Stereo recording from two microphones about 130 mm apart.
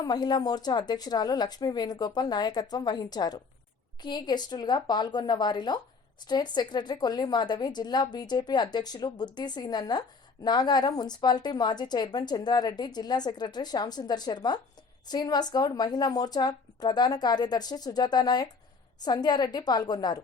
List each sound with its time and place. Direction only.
0.0 s a woman's voice: 30° left (ahead or behind)